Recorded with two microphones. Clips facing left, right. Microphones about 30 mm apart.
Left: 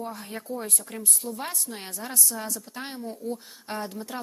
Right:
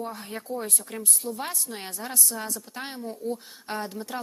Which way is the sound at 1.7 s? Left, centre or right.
Right.